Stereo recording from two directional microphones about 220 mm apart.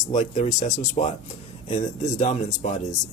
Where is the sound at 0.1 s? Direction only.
35° left (ahead or behind).